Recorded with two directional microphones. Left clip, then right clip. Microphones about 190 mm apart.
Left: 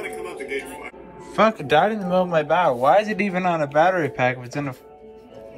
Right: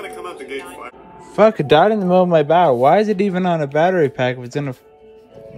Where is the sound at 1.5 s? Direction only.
50° right (ahead or behind).